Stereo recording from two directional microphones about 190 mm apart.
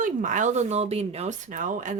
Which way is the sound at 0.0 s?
40° right (ahead or behind).